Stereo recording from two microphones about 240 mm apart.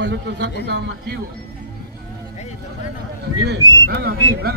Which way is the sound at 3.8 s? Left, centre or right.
Right.